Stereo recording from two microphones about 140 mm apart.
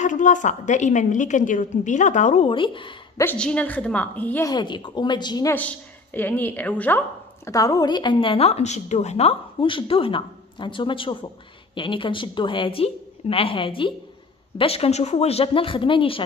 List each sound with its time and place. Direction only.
0.0 s a woman's voice: 60° left (ahead or behind)
2.4 s a woman's voice: 35° left (ahead or behind)
3.3 s a woman's voice: 10° left (ahead or behind)
4.5 s a woman's voice: 30° left (ahead or behind)
5.5 s a woman's voice: 10° left (ahead or behind)
7.4 s a woman's voice: 25° left (ahead or behind)